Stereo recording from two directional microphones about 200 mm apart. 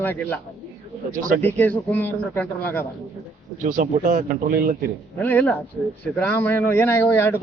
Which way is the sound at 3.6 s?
40° right (ahead or behind).